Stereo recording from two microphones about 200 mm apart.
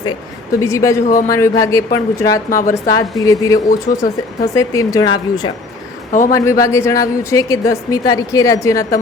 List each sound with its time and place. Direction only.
0.6 s a woman's voice: 15° left (ahead or behind)
1.0 s a man's voice: 40° left (ahead or behind)
1.3 s a woman's voice: 15° left (ahead or behind)
2.5 s a woman's voice: 45° left (ahead or behind)
2.8 s a woman's voice: 15° left (ahead or behind)
3.9 s a woman's voice: 45° left (ahead or behind)
4.4 s a woman's voice: 15° left (ahead or behind)
6.1 s a man's voice: 40° left (ahead or behind)
6.3 s a woman's voice: 15° left (ahead or behind)